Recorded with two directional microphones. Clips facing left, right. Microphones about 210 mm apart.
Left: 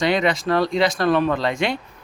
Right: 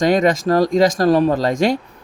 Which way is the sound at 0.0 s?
45° right (ahead or behind).